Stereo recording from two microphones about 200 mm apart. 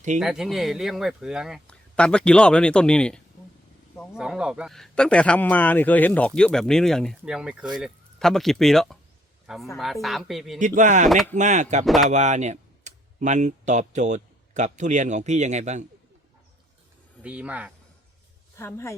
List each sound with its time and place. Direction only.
0.2 s speech: centre (ahead or behind)
4.2 s speech: 5° right (ahead or behind)
10.8 s speech: 35° right (ahead or behind)
11.0 s speech: centre (ahead or behind)
11.3 s speech: 35° right (ahead or behind)
17.2 s speech: 5° right (ahead or behind)
18.5 s a woman's voice: 15° left (ahead or behind)